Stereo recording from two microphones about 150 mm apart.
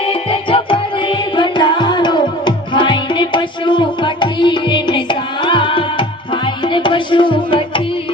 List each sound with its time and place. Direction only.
0.0 s music: 35° left (ahead or behind)